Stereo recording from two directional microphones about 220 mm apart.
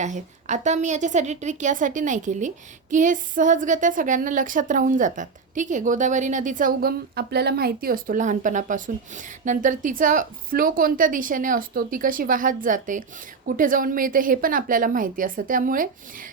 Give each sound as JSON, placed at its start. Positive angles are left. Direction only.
{"t": 0.0, "sound": "a woman's voice", "side_deg": -35}